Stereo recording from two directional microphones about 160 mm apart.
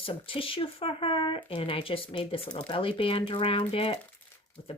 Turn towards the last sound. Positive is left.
turn(degrees=35)  # may be behind; listen again after turning